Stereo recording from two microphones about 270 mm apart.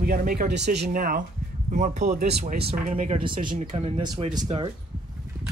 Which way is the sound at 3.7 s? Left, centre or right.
Centre.